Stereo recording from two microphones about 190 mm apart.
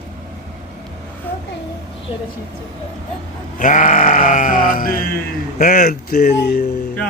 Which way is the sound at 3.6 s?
45° left (ahead or behind).